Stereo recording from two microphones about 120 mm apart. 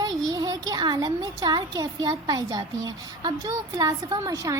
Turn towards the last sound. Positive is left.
turn(degrees=-25)  # may be behind; listen again after turning